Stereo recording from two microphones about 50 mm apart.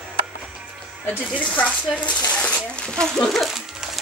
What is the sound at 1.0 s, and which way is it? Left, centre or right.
Speech, left.